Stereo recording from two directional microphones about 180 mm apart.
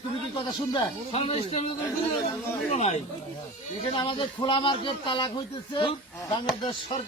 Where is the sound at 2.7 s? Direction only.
35° left (ahead or behind).